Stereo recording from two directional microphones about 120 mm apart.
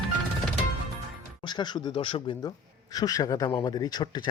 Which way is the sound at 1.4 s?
40° left (ahead or behind).